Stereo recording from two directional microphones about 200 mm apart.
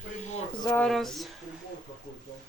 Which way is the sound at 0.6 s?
5° left (ahead or behind).